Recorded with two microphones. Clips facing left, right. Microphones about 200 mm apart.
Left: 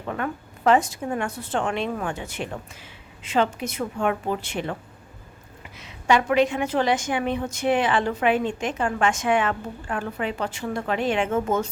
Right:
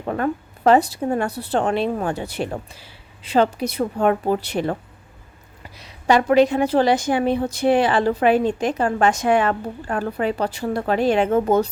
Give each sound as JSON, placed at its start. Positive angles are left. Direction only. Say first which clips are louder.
{"t": 0.0, "sound": "a woman's voice", "louder": "right 6 dB", "side_deg": -40}